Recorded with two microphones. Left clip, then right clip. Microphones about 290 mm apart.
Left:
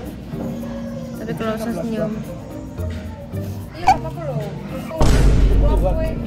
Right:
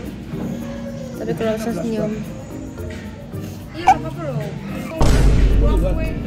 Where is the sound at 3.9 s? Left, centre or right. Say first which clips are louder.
Right 1 dB; centre.